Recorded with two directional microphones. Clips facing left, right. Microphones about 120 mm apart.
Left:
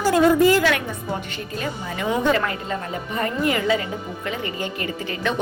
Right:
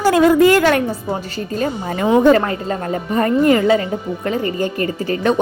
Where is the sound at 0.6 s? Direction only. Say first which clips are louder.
Right 7 dB; 40° right (ahead or behind).